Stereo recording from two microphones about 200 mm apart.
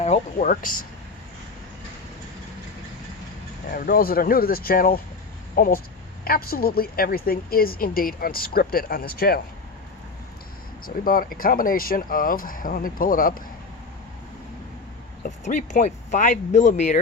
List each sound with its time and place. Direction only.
0.0 s speech: 35° left (ahead or behind)
3.7 s a woman's voice: 45° left (ahead or behind)
10.8 s a woman's voice: 45° left (ahead or behind)
15.2 s speech: 40° left (ahead or behind)